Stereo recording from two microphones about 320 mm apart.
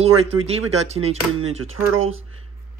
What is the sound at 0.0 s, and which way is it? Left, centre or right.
Speech, centre.